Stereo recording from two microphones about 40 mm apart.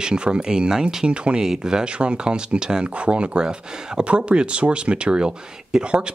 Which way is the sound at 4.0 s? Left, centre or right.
Right.